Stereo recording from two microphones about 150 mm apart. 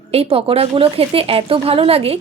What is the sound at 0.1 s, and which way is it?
Speech, 40° right (ahead or behind).